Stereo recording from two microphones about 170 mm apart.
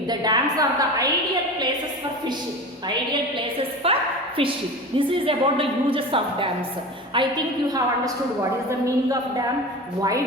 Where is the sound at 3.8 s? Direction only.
35° right (ahead or behind).